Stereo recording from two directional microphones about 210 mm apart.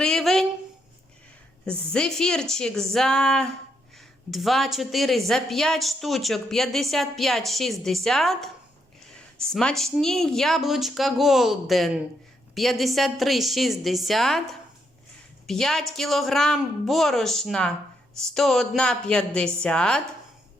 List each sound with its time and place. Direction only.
0.0 s a sound: centre (ahead or behind)
1.6 s a woman's voice: 5° left (ahead or behind)
15.4 s a woman's voice: centre (ahead or behind)